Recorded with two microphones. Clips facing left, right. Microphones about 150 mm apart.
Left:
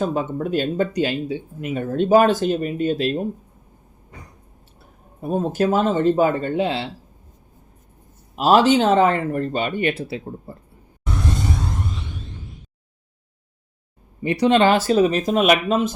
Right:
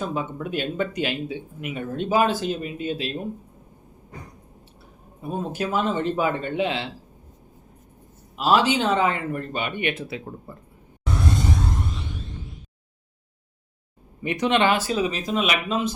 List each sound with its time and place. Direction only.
0.0 s speech: 40° left (ahead or behind)
5.2 s speech: 40° left (ahead or behind)
8.4 s speech: 45° left (ahead or behind)
14.2 s speech: 35° left (ahead or behind)